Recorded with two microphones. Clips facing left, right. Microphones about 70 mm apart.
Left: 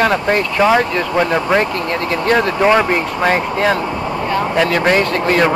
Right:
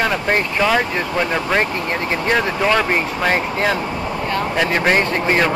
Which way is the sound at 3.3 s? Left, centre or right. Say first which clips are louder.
Left 3 dB; left.